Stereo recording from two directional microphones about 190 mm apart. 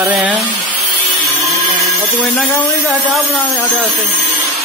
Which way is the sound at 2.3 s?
Centre (ahead or behind).